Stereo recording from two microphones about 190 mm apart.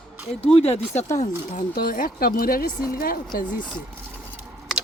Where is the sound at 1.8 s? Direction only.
50° left (ahead or behind).